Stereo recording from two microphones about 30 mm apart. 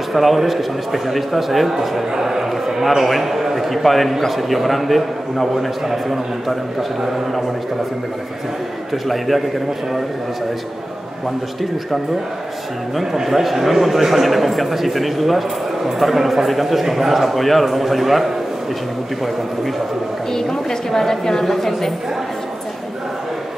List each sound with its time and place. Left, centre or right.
0.1 s a man's voice: centre
8.9 s a man's voice: centre
13.0 s a man's voice: centre
20.3 s a woman's voice: centre